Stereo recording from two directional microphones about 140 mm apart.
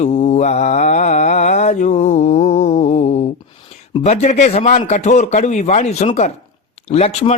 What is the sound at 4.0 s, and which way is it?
A man's voice, 55° left (ahead or behind).